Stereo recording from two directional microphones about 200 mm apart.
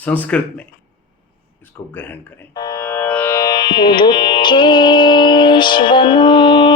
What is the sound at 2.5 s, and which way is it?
Music, 20° left (ahead or behind).